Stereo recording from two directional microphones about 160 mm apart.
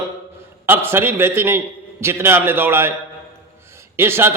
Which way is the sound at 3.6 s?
15° right (ahead or behind).